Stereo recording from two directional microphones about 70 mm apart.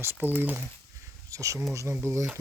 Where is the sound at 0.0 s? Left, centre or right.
Right.